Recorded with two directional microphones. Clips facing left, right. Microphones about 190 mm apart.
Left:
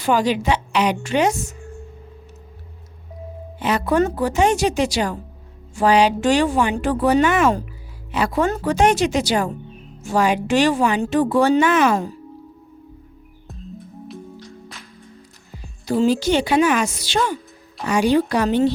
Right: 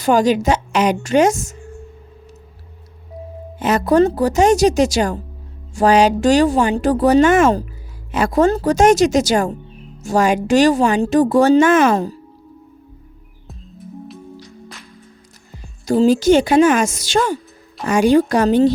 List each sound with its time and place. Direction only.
0.0 s a woman's voice: 45° right (ahead or behind)
3.6 s a woman's voice: 45° right (ahead or behind)
15.5 s a woman's voice: 45° right (ahead or behind)